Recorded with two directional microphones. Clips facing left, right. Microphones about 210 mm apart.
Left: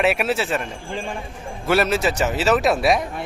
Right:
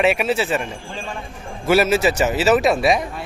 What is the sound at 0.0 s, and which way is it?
Speech, centre (ahead or behind).